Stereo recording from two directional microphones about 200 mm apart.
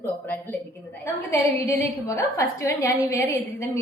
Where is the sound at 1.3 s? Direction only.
15° left (ahead or behind).